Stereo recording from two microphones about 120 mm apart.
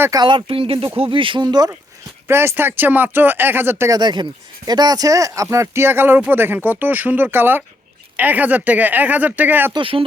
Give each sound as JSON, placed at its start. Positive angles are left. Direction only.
{"t": 0.2, "sound": "speech", "side_deg": -45}
{"t": 2.2, "sound": "speech", "side_deg": -20}
{"t": 9.7, "sound": "speech", "side_deg": -45}